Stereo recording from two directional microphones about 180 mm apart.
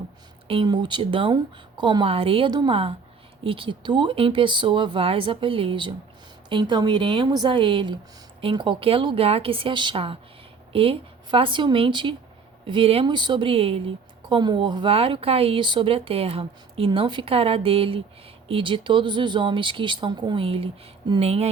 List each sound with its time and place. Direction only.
0.4 s speech: 30° right (ahead or behind)